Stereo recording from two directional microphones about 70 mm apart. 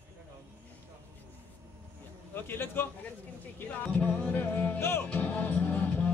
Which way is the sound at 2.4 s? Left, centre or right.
Left.